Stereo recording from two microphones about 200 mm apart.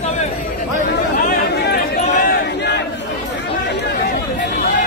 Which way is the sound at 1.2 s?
50° left (ahead or behind).